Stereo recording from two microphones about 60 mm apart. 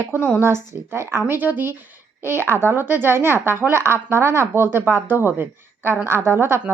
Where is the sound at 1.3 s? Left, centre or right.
Right.